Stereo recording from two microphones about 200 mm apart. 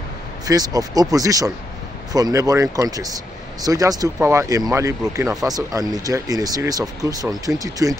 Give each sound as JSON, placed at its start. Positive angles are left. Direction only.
{"t": 0.5, "sound": "speech", "side_deg": -20}